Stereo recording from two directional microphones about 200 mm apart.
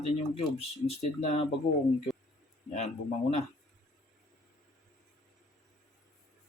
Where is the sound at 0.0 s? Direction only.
35° left (ahead or behind).